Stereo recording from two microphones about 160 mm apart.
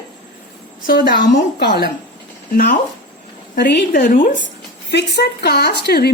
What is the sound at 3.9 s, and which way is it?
Speech, 55° left (ahead or behind).